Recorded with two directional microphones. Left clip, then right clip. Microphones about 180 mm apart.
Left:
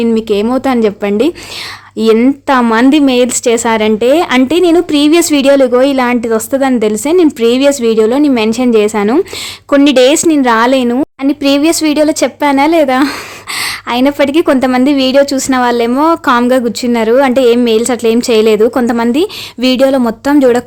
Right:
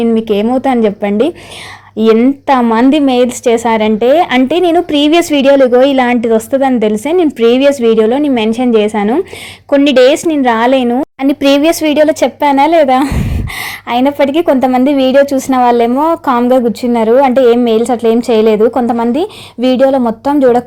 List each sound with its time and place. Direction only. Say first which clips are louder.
0.0 s speech: even; 10° left (ahead or behind)
11.2 s a woman's voice: right 2 dB; 5° right (ahead or behind); by 20.6 s 15° left (ahead or behind)